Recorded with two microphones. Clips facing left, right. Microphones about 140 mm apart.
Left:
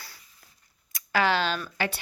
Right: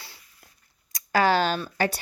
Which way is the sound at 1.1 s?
40° right (ahead or behind).